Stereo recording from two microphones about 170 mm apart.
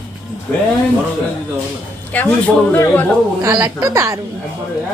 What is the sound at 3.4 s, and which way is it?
Speech, 15° right (ahead or behind).